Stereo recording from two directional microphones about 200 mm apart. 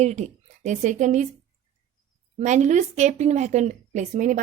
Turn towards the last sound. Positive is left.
turn(degrees=-40)  # may be behind; listen again after turning